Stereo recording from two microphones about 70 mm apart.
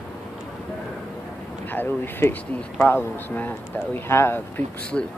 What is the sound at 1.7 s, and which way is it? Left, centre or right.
Speech, left.